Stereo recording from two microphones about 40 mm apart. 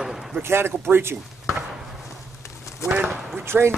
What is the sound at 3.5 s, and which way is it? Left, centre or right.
Speech, right.